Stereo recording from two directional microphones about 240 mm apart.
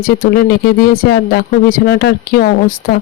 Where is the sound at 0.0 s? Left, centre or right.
Left.